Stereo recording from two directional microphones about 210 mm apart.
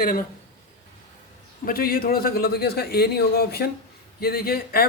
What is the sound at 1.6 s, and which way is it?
A man's voice, 45° left (ahead or behind).